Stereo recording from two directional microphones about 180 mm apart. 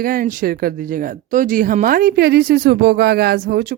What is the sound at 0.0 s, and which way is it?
Speech, 50° right (ahead or behind).